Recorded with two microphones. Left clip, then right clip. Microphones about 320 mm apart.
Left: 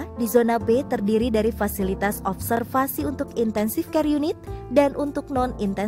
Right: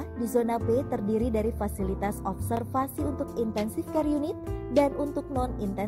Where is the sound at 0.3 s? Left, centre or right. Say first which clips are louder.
Left 7 dB; centre.